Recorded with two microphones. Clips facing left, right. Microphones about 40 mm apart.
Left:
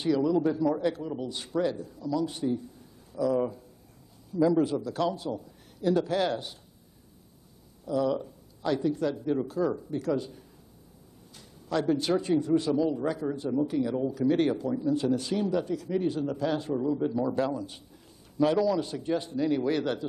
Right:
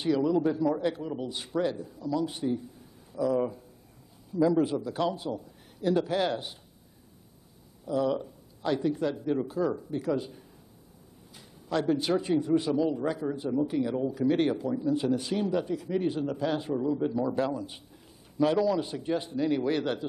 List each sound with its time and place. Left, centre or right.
0.0 s a man's voice: centre
7.8 s speech: centre
9.2 s a man's voice: centre
13.3 s a man's voice: centre